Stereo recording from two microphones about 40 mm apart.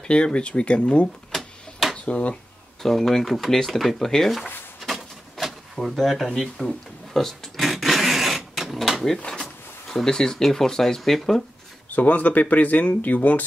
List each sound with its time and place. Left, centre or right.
0.0 s speech: left
1.3 s tick-tock: centre
2.0 s speech: left
2.8 s speech: centre
4.8 s a sound: centre
5.8 s speech: centre
7.7 s printer: centre
9.4 s speech: centre
11.9 s speech: left